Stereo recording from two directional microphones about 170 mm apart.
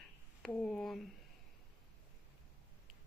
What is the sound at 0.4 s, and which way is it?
Speech, 5° left (ahead or behind).